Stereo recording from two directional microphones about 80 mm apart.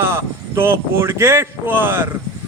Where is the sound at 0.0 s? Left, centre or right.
Right.